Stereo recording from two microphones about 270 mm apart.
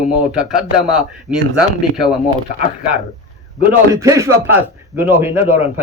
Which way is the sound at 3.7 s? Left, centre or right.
Centre.